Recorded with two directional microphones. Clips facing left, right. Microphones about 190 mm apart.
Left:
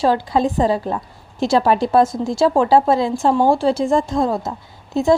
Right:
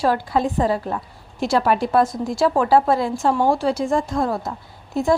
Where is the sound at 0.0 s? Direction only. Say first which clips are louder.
Left 3 dB; 25° left (ahead or behind).